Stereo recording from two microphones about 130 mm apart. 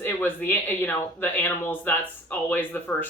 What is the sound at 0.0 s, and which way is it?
Speech, 15° left (ahead or behind).